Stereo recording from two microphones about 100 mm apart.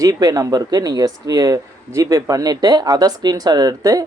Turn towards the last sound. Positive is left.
turn(degrees=-40)  # may be behind; listen again after turning